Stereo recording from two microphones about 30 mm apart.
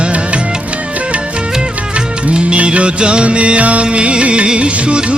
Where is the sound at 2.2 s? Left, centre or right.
Right.